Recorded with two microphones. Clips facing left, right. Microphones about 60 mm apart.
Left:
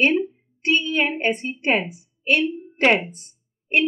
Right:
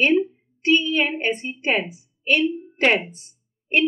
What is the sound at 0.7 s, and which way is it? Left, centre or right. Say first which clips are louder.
Child singing: right 2 dB; centre.